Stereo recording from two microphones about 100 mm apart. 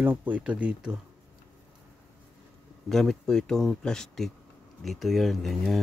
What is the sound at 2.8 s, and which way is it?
Speech, 5° left (ahead or behind).